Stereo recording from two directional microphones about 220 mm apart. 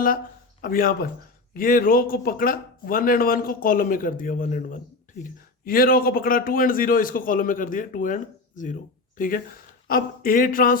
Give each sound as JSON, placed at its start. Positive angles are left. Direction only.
{"t": 0.6, "sound": "a man's voice", "side_deg": 40}